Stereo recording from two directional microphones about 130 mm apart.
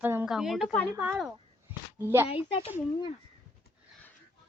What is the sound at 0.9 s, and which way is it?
A woman's voice, 20° right (ahead or behind).